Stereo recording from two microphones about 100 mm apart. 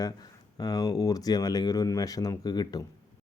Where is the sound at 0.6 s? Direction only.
40° left (ahead or behind).